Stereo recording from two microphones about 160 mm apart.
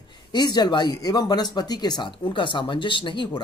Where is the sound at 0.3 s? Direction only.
25° left (ahead or behind).